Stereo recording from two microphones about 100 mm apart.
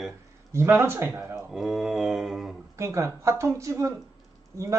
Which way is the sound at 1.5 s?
5° right (ahead or behind).